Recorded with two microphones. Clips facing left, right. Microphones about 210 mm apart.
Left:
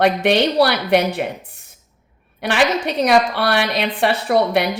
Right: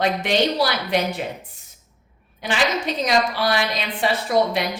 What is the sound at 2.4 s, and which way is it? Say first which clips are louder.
Speech: left 5 dB; 65° left (ahead or behind).